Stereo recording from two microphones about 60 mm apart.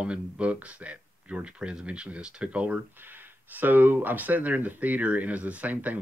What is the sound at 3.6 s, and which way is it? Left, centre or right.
Speech, right.